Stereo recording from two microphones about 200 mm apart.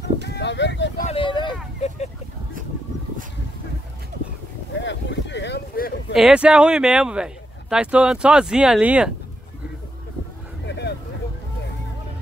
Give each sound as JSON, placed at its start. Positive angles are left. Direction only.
{"t": 0.3, "sound": "speech", "side_deg": 60}
{"t": 1.0, "sound": "speech", "side_deg": 25}
{"t": 4.7, "sound": "a sound", "side_deg": 65}
{"t": 6.1, "sound": "speech", "side_deg": -5}
{"t": 10.6, "sound": "vehicle", "side_deg": 55}